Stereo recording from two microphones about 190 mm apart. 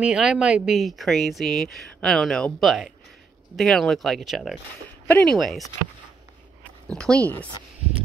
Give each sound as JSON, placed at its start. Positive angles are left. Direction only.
{"t": 0.0, "sound": "speech", "side_deg": -5}
{"t": 7.0, "sound": "speech", "side_deg": 5}